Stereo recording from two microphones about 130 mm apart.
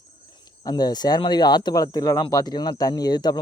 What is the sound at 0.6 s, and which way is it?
Speech, 30° left (ahead or behind).